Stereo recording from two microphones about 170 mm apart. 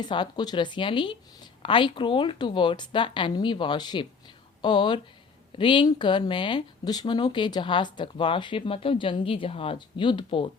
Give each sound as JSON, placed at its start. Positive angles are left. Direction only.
{"t": 0.0, "sound": "speech", "side_deg": 25}